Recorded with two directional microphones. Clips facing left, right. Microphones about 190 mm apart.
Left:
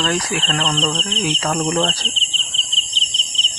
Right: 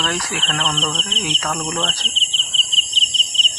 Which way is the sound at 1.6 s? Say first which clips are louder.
Left 6 dB; 30° left (ahead or behind).